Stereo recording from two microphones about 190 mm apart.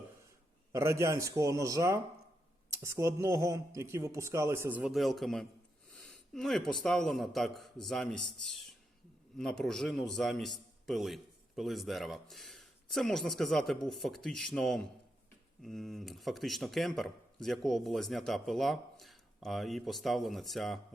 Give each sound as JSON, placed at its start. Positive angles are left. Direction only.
{"t": 0.8, "sound": "a man's voice", "side_deg": -15}